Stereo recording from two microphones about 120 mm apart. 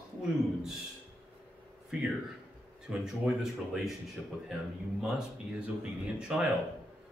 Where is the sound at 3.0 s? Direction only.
5° right (ahead or behind).